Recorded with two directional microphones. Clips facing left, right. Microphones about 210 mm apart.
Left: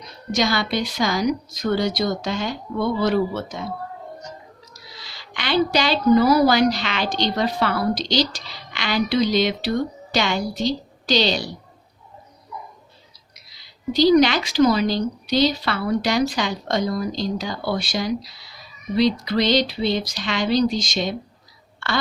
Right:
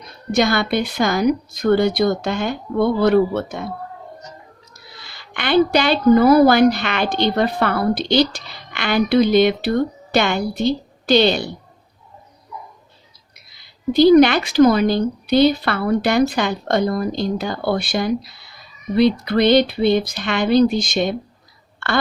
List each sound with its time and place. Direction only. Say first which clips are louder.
0.0 s speech: right 4 dB; 55° right (ahead or behind)
4.9 s speech: right 1 dB; 55° right (ahead or behind)
13.3 s speech: even; 55° right (ahead or behind)